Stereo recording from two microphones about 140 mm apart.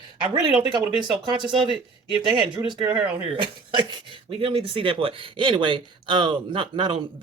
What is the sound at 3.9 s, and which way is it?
Speech, 40° right (ahead or behind).